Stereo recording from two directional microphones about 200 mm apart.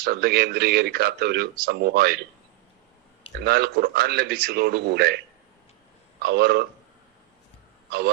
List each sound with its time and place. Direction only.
0.0 s speech: 50° right (ahead or behind)
3.4 s speech: 50° right (ahead or behind)
6.2 s speech: 55° right (ahead or behind)